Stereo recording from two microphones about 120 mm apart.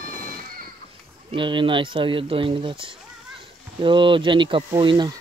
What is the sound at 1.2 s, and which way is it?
Speech, 45° right (ahead or behind).